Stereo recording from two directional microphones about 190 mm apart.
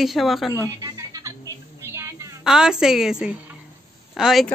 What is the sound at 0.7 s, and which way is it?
Music, 20° right (ahead or behind).